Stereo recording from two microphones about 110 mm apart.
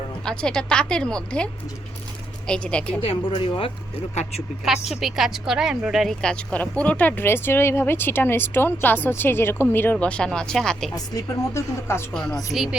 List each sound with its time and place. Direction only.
0.3 s speech: 5° left (ahead or behind)
2.5 s speech: 10° left (ahead or behind)
3.0 s speech: 55° left (ahead or behind)
4.1 s speech: 85° left
4.9 s speech: centre (ahead or behind)
10.9 s speech: 30° left (ahead or behind)
12.1 s a woman's voice: 5° left (ahead or behind)